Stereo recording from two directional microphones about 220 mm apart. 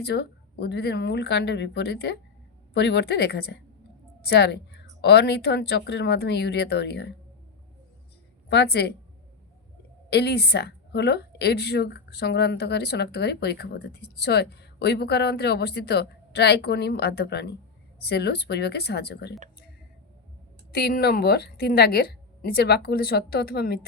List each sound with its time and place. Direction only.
0.0 s speech: 50° left (ahead or behind)
8.4 s speech: 50° left (ahead or behind)
10.1 s speech: 50° left (ahead or behind)
20.7 s speech: 45° left (ahead or behind)